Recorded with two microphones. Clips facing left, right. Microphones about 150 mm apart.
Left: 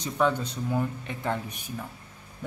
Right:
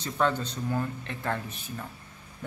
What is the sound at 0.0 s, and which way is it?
Speech, 10° left (ahead or behind).